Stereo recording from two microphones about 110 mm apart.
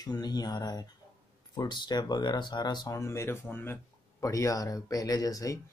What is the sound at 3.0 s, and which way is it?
Speech, 25° left (ahead or behind).